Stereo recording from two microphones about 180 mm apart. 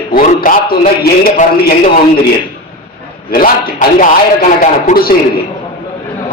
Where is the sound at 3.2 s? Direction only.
55° left (ahead or behind).